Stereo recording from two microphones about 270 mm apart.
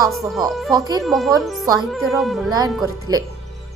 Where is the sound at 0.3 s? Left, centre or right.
Centre.